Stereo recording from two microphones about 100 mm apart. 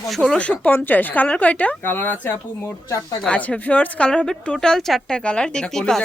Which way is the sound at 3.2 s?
10° left (ahead or behind).